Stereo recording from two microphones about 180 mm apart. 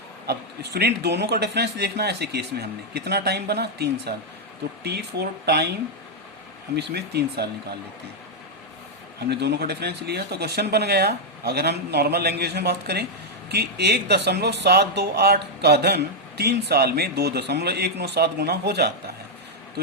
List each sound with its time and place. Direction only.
0.3 s speech: 65° right (ahead or behind)
6.7 s speech: 65° right (ahead or behind)
9.3 s speech: 70° right (ahead or behind)